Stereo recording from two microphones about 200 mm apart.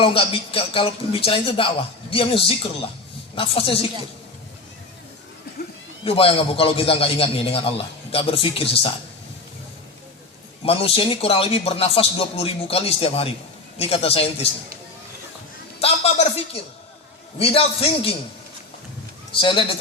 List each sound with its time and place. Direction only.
0.0 s a man's voice: 25° left (ahead or behind)
6.1 s a man's voice: 30° left (ahead or behind)
10.7 s a man's voice: 30° left (ahead or behind)
15.8 s a sound: 30° left (ahead or behind)
17.3 s a man's voice: 30° left (ahead or behind)
19.4 s a man's voice: 25° left (ahead or behind)